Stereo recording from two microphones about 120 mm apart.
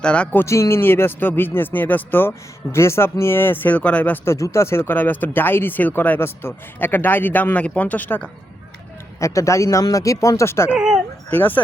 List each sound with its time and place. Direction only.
0.0 s speech: 10° left (ahead or behind)
4.4 s speech: 25° left (ahead or behind)
9.2 s speech: 25° left (ahead or behind)
10.7 s speech: 5° right (ahead or behind)
11.3 s speech: 15° left (ahead or behind)